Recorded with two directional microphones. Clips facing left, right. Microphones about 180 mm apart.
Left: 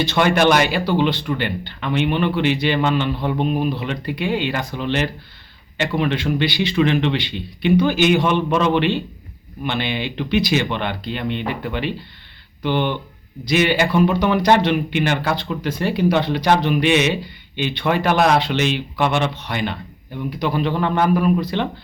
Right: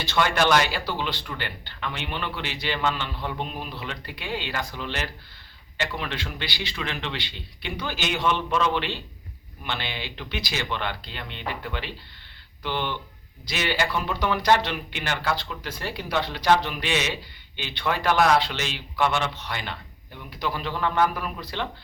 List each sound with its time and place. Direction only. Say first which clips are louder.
0.0 s speech: left 7 dB; 20° left (ahead or behind)
3.2 s a man's voice: left 10 dB; 60° left (ahead or behind)
3.7 s speech: left 12 dB; 20° left (ahead or behind)
13.4 s speech: left 9 dB; 15° left (ahead or behind)